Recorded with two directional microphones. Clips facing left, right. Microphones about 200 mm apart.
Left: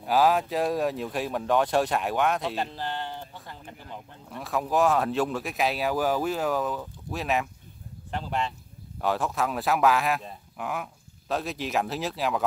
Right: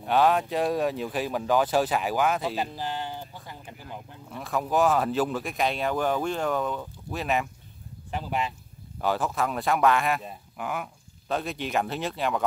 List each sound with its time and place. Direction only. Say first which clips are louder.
0.0 s speech: even; centre (ahead or behind)